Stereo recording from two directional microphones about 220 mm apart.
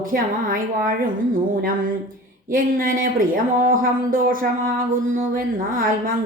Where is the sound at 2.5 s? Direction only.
40° right (ahead or behind).